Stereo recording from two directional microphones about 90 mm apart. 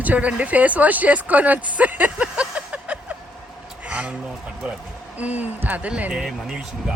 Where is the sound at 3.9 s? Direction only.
15° right (ahead or behind).